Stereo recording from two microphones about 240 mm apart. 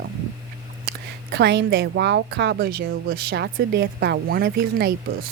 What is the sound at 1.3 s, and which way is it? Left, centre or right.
Speech, right.